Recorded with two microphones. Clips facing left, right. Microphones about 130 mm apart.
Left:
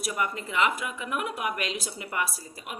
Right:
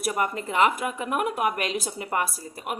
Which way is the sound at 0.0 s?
40° right (ahead or behind).